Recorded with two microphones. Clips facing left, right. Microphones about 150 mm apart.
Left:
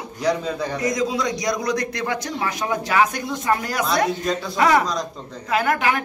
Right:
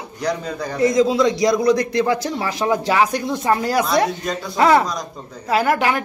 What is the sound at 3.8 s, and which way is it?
Speech, centre (ahead or behind).